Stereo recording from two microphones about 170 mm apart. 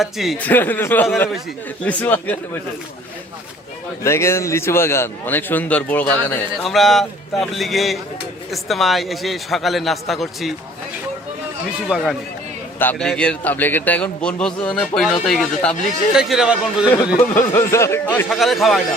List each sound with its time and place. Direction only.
0.0 s a man's voice: centre (ahead or behind)
0.4 s a man's voice: 10° left (ahead or behind)
4.0 s a man's voice: 15° left (ahead or behind); by 10.5 s centre (ahead or behind)
11.9 s a man's voice: centre (ahead or behind)
17.3 s a man's voice: 15° left (ahead or behind)
18.3 s a man's voice: centre (ahead or behind)